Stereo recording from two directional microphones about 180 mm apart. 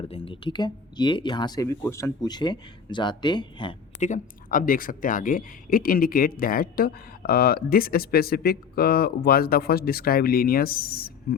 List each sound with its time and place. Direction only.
0.0 s speech: 30° left (ahead or behind)
4.0 s speech: 45° left (ahead or behind)